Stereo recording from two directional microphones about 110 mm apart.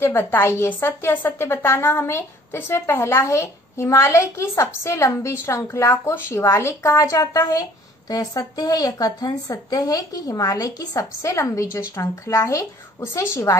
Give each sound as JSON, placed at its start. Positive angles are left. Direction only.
{"t": 0.0, "sound": "a woman's voice", "side_deg": 20}